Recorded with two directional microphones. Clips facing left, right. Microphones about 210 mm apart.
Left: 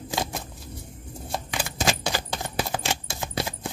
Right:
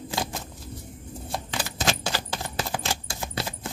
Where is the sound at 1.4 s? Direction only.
15° left (ahead or behind).